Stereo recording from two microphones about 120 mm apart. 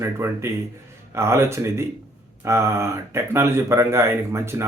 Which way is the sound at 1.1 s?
20° right (ahead or behind).